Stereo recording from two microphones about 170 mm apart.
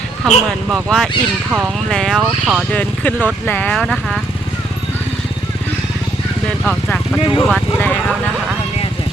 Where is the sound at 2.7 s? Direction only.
10° left (ahead or behind).